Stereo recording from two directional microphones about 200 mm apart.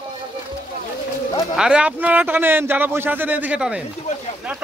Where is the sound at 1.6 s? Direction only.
5° right (ahead or behind).